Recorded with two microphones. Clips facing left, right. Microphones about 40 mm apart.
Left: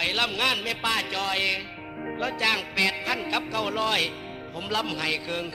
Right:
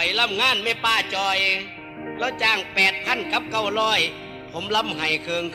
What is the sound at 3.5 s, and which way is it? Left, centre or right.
A man's voice, right.